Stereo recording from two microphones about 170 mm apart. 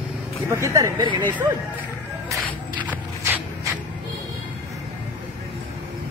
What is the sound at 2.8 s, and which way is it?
Walk, 10° right (ahead or behind).